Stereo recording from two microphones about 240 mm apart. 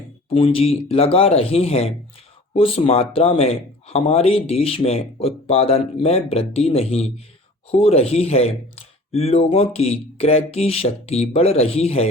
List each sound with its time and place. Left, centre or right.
0.3 s speech: left